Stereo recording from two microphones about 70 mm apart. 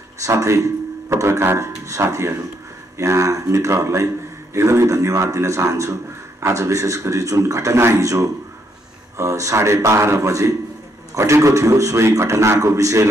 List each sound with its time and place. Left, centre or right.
0.2 s a man's voice: right
1.9 s a man's voice: right